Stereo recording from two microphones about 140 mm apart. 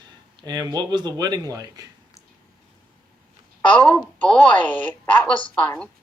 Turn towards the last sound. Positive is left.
turn(degrees=10)  # may be behind; listen again after turning